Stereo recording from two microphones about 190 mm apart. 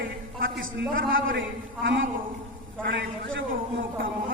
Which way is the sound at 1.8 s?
70° right (ahead or behind).